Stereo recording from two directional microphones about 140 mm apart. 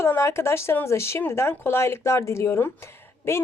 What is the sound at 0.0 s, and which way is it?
Speech, 20° left (ahead or behind).